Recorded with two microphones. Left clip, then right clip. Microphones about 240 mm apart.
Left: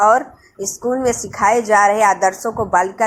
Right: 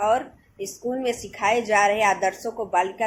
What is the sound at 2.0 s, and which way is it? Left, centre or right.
A woman's voice, centre.